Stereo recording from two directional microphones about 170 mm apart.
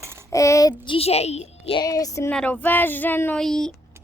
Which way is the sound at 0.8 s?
30° left (ahead or behind).